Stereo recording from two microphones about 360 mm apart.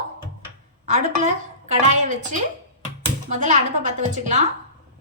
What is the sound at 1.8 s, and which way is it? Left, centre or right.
Speech, centre.